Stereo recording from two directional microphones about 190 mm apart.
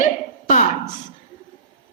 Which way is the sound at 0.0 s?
40° left (ahead or behind).